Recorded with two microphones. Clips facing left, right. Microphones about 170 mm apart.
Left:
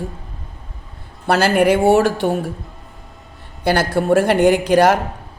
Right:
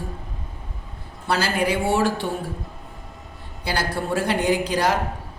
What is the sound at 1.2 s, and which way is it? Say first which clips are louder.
Speech: left 8 dB; 70° left (ahead or behind).